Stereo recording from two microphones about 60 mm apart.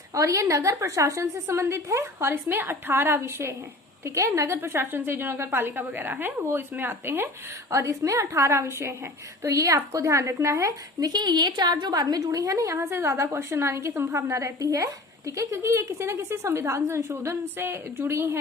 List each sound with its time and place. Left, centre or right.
0.1 s a woman's voice: right
4.0 s a woman's voice: right
7.7 s a woman's voice: right
11.7 s a woman's voice: right
15.5 s a woman's voice: right